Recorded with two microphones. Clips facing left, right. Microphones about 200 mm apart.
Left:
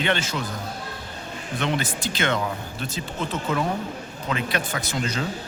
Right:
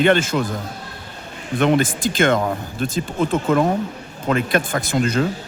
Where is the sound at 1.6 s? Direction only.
50° right (ahead or behind).